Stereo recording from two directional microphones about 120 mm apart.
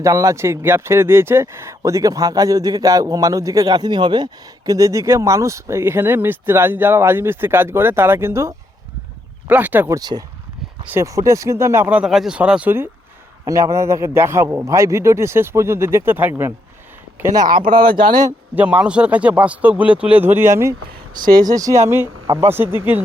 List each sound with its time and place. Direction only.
0.0 s a man's voice: 25° right (ahead or behind)
9.9 s a man's voice: 35° right (ahead or behind)
10.8 s speech: 20° right (ahead or behind)
17.9 s a man's voice: 40° right (ahead or behind)
18.5 s a man's voice: 10° right (ahead or behind)
21.2 s speech: 35° right (ahead or behind); by 23.0 s 20° right (ahead or behind)